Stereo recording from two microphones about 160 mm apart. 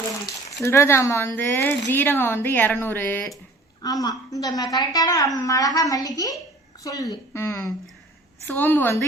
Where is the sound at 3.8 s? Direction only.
25° left (ahead or behind).